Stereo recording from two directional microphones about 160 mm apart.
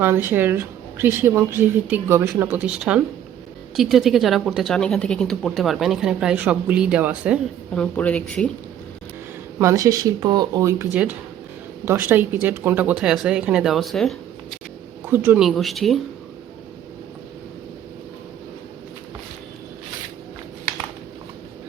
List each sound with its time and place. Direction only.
0.0 s speech: 15° right (ahead or behind)
7.7 s speech: 5° left (ahead or behind)
9.6 s speech: 20° right (ahead or behind); by 14.2 s centre (ahead or behind)
15.1 s speech: 15° right (ahead or behind)
15.4 s speech: centre (ahead or behind)